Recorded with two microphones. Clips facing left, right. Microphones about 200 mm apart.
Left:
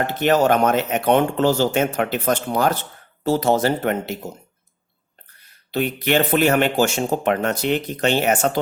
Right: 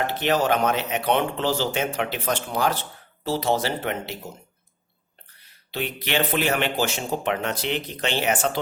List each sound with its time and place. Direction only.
0.1 s speech: 50° left (ahead or behind)
5.7 s speech: 45° left (ahead or behind)